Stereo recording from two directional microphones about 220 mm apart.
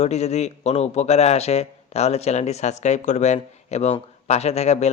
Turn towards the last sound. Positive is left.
turn(degrees=30)  # may be behind; listen again after turning